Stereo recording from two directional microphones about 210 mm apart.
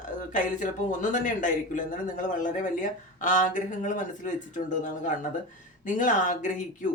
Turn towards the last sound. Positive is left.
turn(degrees=35)  # may be behind; listen again after turning